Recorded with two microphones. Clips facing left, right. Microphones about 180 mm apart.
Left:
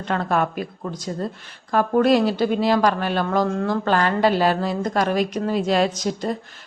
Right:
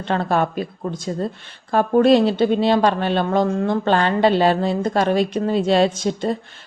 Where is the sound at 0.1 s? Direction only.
30° right (ahead or behind).